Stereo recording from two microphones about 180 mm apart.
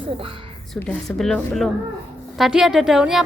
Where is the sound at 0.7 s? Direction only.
5° left (ahead or behind).